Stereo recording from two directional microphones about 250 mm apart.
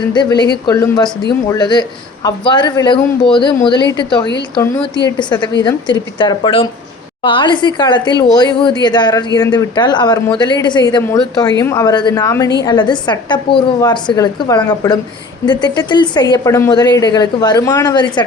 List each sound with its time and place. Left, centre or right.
0.1 s speech: centre